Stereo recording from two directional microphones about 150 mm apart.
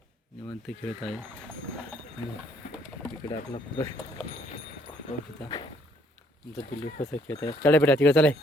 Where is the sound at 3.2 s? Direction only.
30° left (ahead or behind).